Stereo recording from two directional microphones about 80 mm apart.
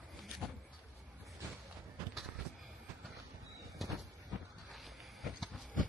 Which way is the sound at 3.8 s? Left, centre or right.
Centre.